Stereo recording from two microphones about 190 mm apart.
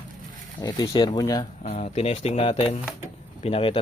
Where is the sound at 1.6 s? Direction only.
35° left (ahead or behind).